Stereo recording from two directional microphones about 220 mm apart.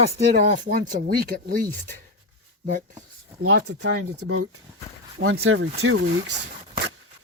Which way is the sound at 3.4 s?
75° right (ahead or behind).